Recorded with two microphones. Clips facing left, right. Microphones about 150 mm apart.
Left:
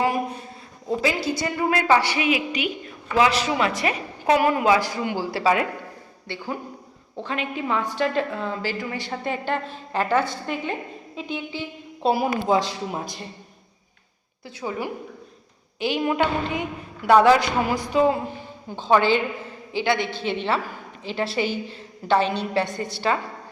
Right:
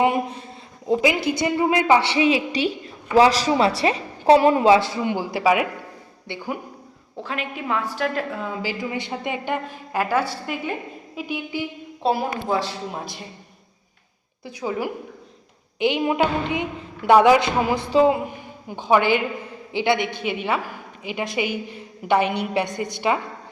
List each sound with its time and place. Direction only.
0.9 s a woman's voice: 20° right (ahead or behind)
7.2 s a woman's voice: centre (ahead or behind)
12.0 s a woman's voice: centre (ahead or behind)
12.5 s speech: 15° left (ahead or behind)
15.8 s a woman's voice: 20° right (ahead or behind)